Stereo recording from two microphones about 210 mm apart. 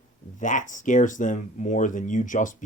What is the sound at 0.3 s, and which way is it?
Speech, 35° left (ahead or behind).